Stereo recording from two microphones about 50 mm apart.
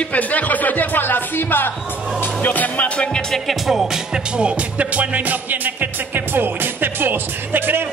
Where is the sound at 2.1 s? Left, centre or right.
Left.